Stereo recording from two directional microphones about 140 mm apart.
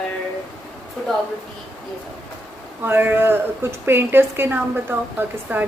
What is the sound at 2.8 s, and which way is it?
A woman's voice, 15° right (ahead or behind).